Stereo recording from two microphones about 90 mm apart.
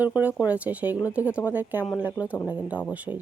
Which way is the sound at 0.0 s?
20° right (ahead or behind).